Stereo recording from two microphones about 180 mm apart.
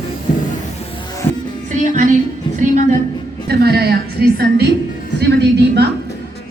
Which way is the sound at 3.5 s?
60° right (ahead or behind).